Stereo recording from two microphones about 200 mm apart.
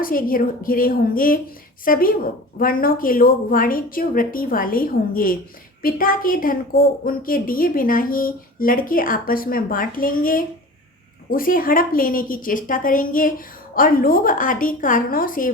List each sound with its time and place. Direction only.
0.0 s a woman's voice: 45° left (ahead or behind)